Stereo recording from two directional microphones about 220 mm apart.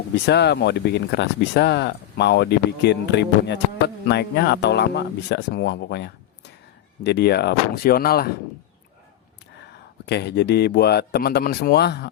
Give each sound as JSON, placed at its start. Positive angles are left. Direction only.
{"t": 0.3, "sound": "speech", "side_deg": 50}
{"t": 10.1, "sound": "speech", "side_deg": 50}